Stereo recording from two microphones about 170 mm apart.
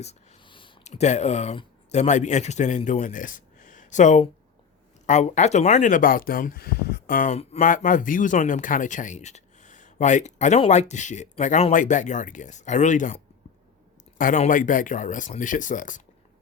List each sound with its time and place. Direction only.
0.0 s whispering: 40° left (ahead or behind)
0.9 s speech: 45° left (ahead or behind)
7.3 s speech: 45° left (ahead or behind)